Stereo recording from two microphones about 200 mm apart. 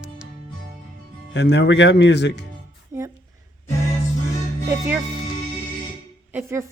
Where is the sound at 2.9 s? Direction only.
15° right (ahead or behind).